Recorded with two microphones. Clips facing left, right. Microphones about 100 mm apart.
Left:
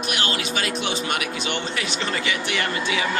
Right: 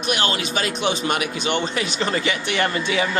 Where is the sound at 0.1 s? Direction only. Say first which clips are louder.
Right 5 dB; 30° right (ahead or behind).